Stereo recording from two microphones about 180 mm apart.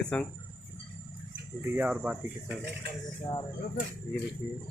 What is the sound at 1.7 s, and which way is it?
Speech, 10° right (ahead or behind).